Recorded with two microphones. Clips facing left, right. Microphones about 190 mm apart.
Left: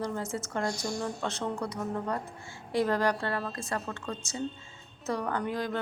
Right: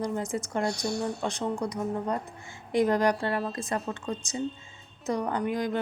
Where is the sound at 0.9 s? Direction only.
65° right (ahead or behind).